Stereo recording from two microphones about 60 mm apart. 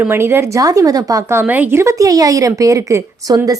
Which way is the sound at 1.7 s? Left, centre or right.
Right.